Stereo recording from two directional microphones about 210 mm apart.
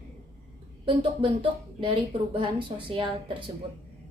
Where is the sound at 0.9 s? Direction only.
25° right (ahead or behind).